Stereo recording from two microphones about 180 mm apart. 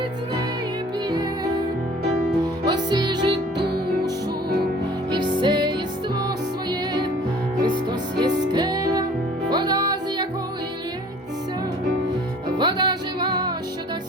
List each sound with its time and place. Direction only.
2.6 s music: 25° right (ahead or behind)
5.1 s music: 25° right (ahead or behind)
12.5 s music: 25° right (ahead or behind)